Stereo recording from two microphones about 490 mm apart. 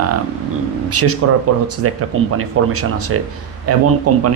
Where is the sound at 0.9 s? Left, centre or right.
Right.